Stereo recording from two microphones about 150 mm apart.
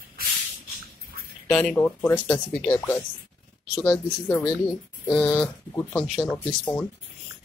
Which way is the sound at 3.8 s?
15° left (ahead or behind).